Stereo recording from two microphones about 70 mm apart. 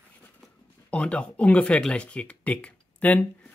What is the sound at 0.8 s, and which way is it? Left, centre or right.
Speech, centre.